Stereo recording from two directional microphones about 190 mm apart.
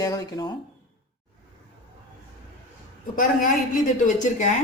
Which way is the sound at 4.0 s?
40° left (ahead or behind).